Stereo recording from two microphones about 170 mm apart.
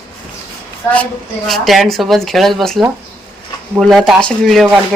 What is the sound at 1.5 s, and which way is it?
Speech, centre (ahead or behind).